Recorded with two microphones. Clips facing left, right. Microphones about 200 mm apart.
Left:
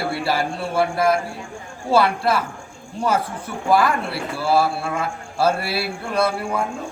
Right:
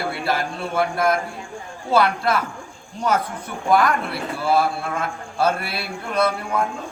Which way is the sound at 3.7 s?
5° left (ahead or behind).